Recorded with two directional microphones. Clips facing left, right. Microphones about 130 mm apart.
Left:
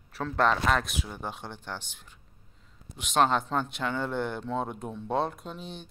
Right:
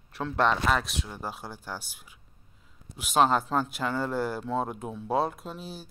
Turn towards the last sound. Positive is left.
turn(degrees=-5)  # may be behind; listen again after turning